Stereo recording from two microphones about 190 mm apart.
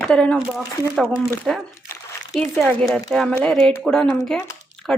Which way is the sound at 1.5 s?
Centre (ahead or behind).